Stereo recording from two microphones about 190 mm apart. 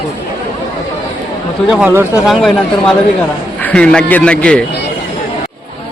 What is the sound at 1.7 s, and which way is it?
A man's voice, 10° right (ahead or behind).